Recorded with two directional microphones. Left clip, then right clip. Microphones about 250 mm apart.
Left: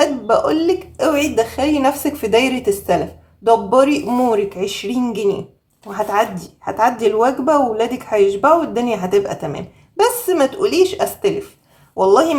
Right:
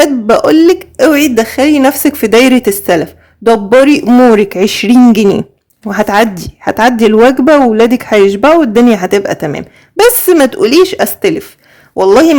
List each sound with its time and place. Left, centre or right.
0.0 s a woman's voice: right